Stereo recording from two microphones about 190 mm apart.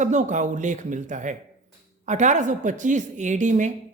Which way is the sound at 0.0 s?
40° right (ahead or behind).